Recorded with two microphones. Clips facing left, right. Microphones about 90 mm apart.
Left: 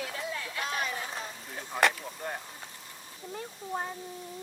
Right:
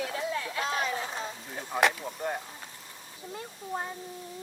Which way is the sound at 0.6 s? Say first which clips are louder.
Right 2 dB; 25° right (ahead or behind).